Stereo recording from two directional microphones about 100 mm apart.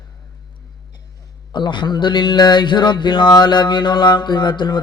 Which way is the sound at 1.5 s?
50° left (ahead or behind).